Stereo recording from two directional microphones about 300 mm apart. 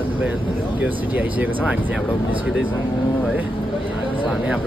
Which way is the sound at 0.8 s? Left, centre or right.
Centre.